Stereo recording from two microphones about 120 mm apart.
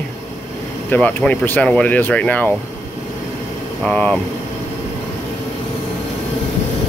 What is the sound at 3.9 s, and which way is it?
Speech, 10° left (ahead or behind).